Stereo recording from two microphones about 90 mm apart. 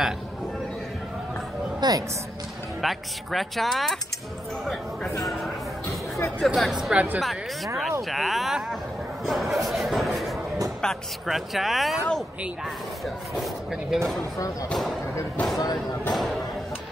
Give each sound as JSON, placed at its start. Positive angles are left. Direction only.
{"t": 1.8, "sound": "a woman's voice", "side_deg": -45}
{"t": 2.8, "sound": "speech", "side_deg": 0}
{"t": 5.2, "sound": "speech", "side_deg": 0}
{"t": 5.9, "sound": "a sound", "side_deg": 35}
{"t": 6.4, "sound": "speech", "side_deg": 0}
{"t": 7.2, "sound": "speech", "side_deg": 0}
{"t": 9.2, "sound": "a sound", "side_deg": 0}
{"t": 10.8, "sound": "speech", "side_deg": 0}
{"t": 15.6, "sound": "speech", "side_deg": 45}
{"t": 16.1, "sound": "speech", "side_deg": 0}